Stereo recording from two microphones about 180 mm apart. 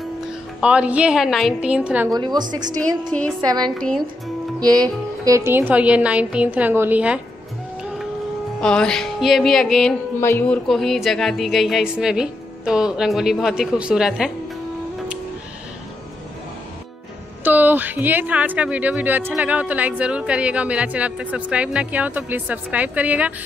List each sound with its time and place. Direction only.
0.6 s speech: 5° right (ahead or behind)
2.0 s a woman's voice: 25° right (ahead or behind)
3.7 s speech: 5° left (ahead or behind)
4.6 s speech: 20° right (ahead or behind)
8.5 s speech: 5° left (ahead or behind)
17.4 s speech: 10° right (ahead or behind)